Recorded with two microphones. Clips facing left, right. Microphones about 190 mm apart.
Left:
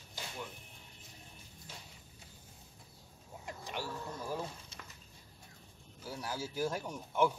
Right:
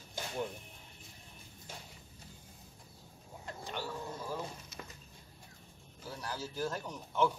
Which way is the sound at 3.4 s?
10° left (ahead or behind).